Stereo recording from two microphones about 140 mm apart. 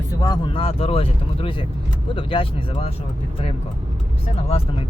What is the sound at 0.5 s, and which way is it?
Speech, 40° left (ahead or behind).